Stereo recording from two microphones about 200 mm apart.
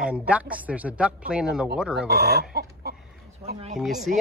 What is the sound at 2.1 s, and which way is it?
Chicken, 50° right (ahead or behind).